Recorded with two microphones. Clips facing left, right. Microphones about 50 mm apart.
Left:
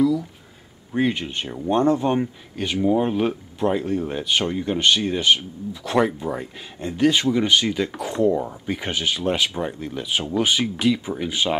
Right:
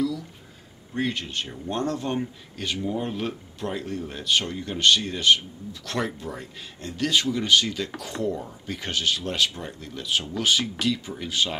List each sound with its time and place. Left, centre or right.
0.9 s speech: centre
8.3 s speech: left